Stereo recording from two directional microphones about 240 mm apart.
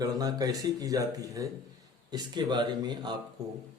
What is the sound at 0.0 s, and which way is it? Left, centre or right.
Speech, centre.